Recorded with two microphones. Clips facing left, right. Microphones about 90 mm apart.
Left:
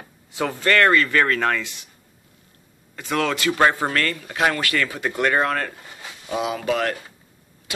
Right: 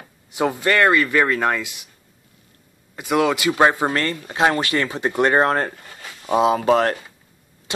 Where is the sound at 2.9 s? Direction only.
15° right (ahead or behind); by 6.9 s 40° right (ahead or behind).